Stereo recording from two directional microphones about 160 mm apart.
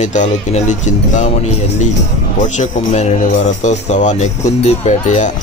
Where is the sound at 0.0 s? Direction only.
50° left (ahead or behind).